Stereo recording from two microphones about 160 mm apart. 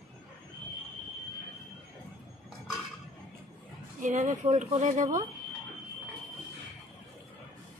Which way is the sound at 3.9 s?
50° right (ahead or behind).